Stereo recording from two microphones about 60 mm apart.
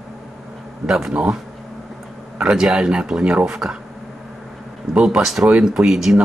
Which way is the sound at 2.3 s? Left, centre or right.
Centre.